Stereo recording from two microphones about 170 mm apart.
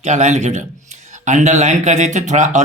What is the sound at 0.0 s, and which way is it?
A man's voice, 45° right (ahead or behind).